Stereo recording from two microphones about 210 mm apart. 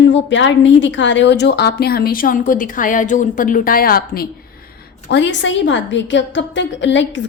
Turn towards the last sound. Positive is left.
turn(degrees=60)  # may be behind; listen again after turning